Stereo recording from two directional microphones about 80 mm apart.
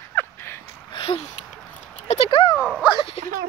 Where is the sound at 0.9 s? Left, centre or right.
Left.